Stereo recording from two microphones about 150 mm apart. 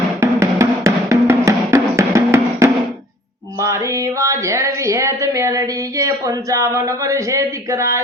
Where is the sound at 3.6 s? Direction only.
20° right (ahead or behind).